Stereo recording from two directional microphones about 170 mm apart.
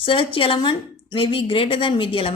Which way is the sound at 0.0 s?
30° left (ahead or behind).